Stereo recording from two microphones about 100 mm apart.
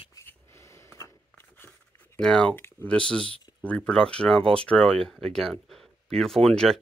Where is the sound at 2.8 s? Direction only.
10° left (ahead or behind).